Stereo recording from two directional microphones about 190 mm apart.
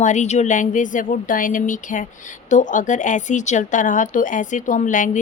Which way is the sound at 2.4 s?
40° left (ahead or behind).